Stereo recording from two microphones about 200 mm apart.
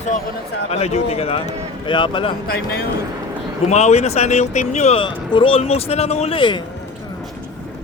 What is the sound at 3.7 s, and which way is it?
Speech, 35° left (ahead or behind).